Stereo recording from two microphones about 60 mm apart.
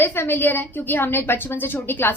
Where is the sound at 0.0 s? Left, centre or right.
Left.